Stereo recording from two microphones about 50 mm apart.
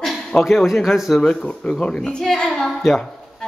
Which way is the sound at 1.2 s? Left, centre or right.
Centre.